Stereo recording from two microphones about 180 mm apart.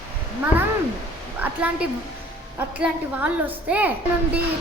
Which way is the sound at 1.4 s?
10° right (ahead or behind).